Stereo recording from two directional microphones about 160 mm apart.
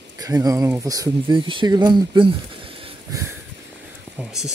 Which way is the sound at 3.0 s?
20° right (ahead or behind).